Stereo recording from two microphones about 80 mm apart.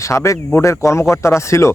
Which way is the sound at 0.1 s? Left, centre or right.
Left.